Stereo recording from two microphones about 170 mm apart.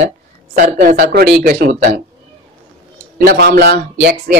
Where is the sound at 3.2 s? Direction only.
65° right (ahead or behind).